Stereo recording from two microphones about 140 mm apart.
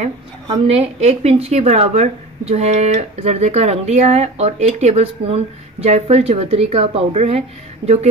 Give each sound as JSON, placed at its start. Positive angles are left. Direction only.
{"t": 0.5, "sound": "a woman's voice", "side_deg": -50}